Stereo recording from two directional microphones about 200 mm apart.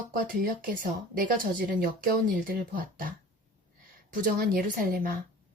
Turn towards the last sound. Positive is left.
turn(degrees=-45)  # may be behind; listen again after turning